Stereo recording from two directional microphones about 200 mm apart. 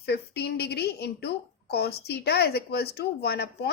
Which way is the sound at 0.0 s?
55° left (ahead or behind).